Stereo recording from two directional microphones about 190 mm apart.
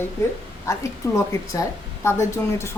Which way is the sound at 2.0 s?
15° left (ahead or behind).